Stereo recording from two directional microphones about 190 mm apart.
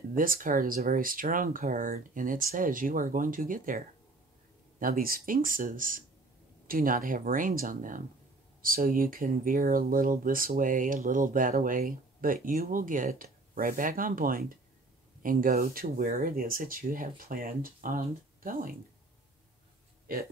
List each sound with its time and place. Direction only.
0.1 s speech: 45° right (ahead or behind)
20.1 s speech: 50° right (ahead or behind)